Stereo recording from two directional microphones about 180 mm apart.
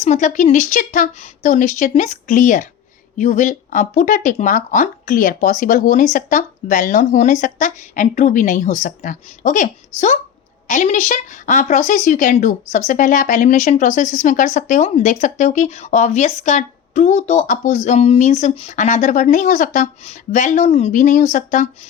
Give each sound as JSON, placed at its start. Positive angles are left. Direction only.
{"t": 0.0, "sound": "speech", "side_deg": 40}